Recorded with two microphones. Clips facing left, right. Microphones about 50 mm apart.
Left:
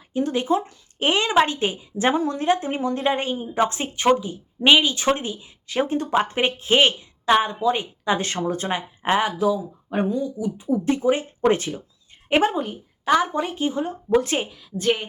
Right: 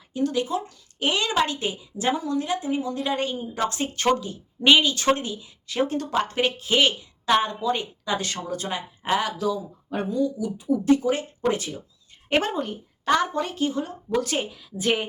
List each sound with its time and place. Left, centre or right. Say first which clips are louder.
0.1 s speech: left 3 dB; left
7.3 s speech: left 3 dB; centre; by 11.8 s left
12.3 s speech: left 4 dB; centre
14.5 s a woman's voice: left 2 dB; centre